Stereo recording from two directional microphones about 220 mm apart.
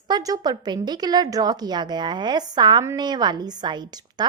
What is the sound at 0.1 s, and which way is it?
A woman's voice, 15° right (ahead or behind).